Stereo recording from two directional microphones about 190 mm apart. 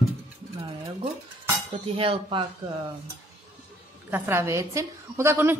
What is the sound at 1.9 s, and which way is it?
Speech, 30° right (ahead or behind).